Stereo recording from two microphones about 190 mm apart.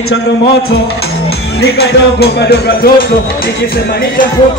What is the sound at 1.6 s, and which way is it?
Music, 55° left (ahead or behind).